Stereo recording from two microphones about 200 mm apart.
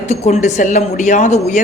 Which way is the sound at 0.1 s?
35° left (ahead or behind).